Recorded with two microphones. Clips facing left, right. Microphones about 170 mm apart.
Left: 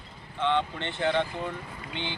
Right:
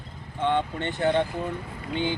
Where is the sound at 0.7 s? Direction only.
45° right (ahead or behind).